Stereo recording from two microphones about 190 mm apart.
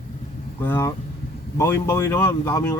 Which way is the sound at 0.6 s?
10° left (ahead or behind).